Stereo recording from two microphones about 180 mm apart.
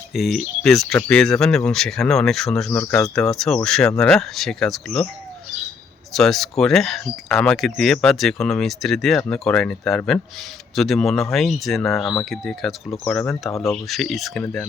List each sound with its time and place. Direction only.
0.1 s speech: centre (ahead or behind)
6.1 s speech: centre (ahead or behind)